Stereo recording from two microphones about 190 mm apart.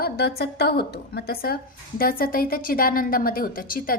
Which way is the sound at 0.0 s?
55° left (ahead or behind).